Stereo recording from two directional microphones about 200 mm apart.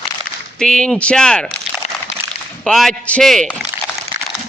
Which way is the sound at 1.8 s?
35° left (ahead or behind).